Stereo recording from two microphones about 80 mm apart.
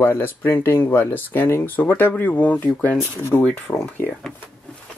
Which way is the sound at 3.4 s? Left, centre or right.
Centre.